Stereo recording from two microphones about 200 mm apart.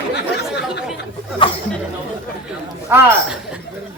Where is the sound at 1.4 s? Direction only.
25° left (ahead or behind).